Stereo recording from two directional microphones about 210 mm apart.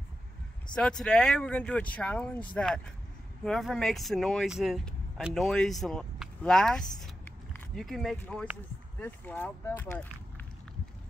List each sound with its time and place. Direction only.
0.7 s speech: 5° left (ahead or behind)